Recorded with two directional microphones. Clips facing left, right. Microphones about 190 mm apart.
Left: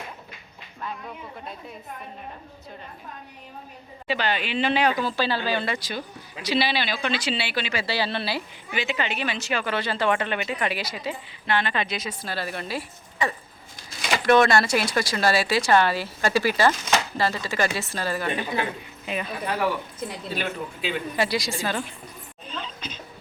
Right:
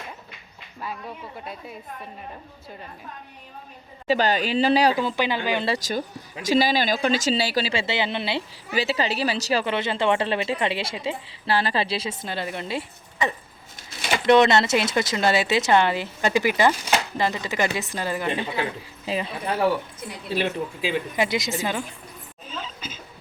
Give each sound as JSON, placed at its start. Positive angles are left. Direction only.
{"t": 4.0, "sound": "speech", "side_deg": -40}
{"t": 5.0, "sound": "speech", "side_deg": -20}
{"t": 5.6, "sound": "speech", "side_deg": -40}
{"t": 8.7, "sound": "speech", "side_deg": -35}
{"t": 9.7, "sound": "a woman's voice", "side_deg": -20}
{"t": 21.2, "sound": "a woman's voice", "side_deg": -20}
{"t": 22.4, "sound": "a sound", "side_deg": -5}